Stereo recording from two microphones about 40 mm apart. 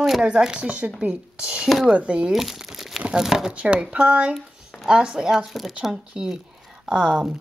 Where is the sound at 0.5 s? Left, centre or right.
Right.